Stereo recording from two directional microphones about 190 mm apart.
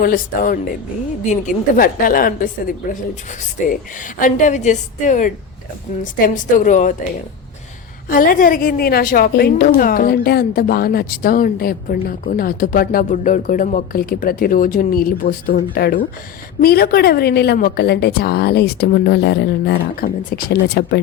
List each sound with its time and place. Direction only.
0.0 s a woman's voice: 50° left (ahead or behind)
8.1 s a woman's voice: 45° left (ahead or behind)